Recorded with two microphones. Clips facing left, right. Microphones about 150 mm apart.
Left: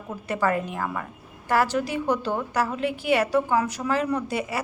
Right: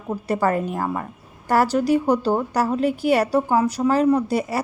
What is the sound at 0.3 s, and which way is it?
Speech, 35° right (ahead or behind).